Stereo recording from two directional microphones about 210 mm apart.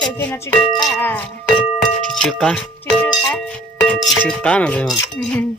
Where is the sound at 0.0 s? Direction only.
10° left (ahead or behind).